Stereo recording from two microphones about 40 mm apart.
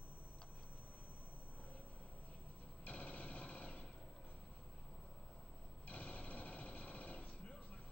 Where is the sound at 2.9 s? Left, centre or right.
Left.